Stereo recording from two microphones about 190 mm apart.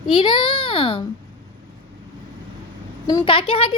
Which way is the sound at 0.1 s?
25° left (ahead or behind).